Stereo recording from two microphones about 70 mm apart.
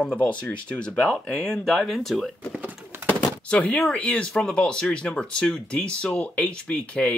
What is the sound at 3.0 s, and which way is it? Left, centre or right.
Chopping, centre.